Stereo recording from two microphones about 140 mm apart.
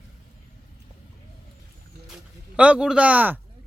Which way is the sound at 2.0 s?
5° right (ahead or behind).